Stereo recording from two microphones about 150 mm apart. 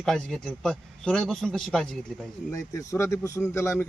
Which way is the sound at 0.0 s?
5° left (ahead or behind).